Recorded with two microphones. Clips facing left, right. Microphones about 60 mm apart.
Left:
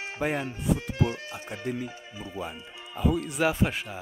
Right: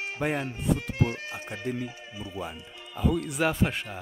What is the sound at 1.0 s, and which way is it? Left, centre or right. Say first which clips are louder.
Speech: even; right.